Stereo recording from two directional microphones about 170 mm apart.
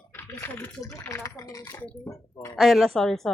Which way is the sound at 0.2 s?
15° left (ahead or behind).